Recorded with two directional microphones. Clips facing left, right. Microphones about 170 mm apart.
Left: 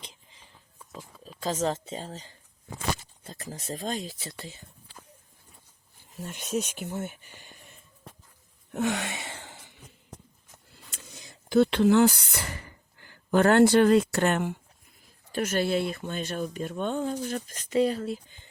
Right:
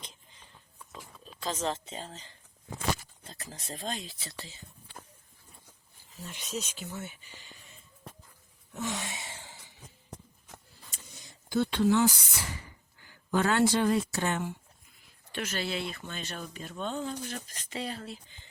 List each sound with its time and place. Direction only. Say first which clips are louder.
1.2 s speech: left 5 dB; 40° left (ahead or behind)
6.1 s speech: left 7 dB; 50° left (ahead or behind)
8.7 s a sound: left 7 dB; 65° left (ahead or behind)
11.1 s speech: left 7 dB; 90° left; by 14.6 s 65° left (ahead or behind)
15.3 s speech: left 8 dB; 45° left (ahead or behind)